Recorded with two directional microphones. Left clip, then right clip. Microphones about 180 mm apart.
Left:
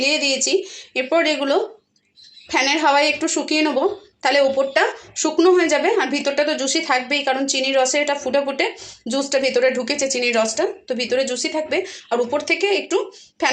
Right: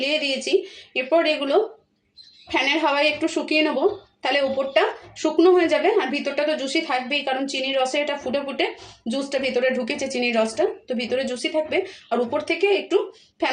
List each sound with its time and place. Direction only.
0.0 s a woman's voice: 10° left (ahead or behind)